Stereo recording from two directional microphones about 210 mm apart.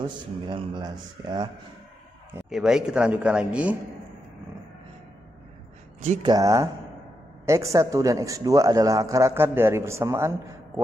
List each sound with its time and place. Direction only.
0.0 s speech: 25° right (ahead or behind)
2.5 s speech: 5° right (ahead or behind)
6.2 s a man's voice: 15° right (ahead or behind)